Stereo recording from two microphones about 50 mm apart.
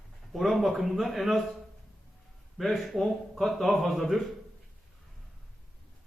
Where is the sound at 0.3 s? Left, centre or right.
Centre.